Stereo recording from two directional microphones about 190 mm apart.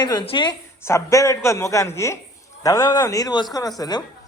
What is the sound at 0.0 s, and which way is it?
A woman's voice, 20° left (ahead or behind).